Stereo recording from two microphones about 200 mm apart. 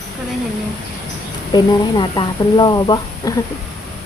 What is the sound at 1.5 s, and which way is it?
Speech, 20° left (ahead or behind).